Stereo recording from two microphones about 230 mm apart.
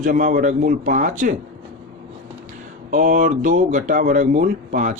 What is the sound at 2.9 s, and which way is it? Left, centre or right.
Speech, right.